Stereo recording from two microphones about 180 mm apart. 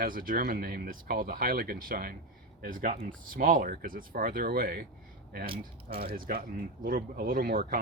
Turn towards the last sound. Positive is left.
turn(degrees=-55)  # may be behind; listen again after turning